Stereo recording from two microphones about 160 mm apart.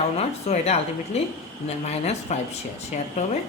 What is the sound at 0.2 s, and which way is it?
A woman's voice, 40° left (ahead or behind).